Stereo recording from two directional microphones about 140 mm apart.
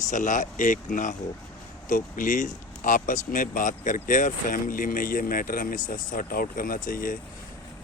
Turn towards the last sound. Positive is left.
turn(degrees=80)